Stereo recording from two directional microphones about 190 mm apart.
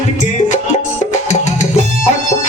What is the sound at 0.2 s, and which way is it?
Music, 40° left (ahead or behind).